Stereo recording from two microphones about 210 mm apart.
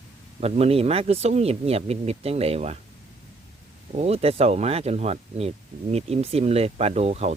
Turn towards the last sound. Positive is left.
turn(degrees=-30)  # may be behind; listen again after turning